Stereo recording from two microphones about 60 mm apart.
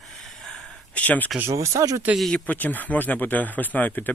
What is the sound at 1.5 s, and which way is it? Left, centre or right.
Speech, right.